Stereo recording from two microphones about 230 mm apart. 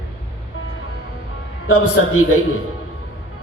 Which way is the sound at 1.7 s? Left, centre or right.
Left.